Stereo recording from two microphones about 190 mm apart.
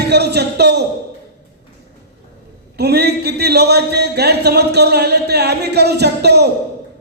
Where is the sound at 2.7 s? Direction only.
60° right (ahead or behind).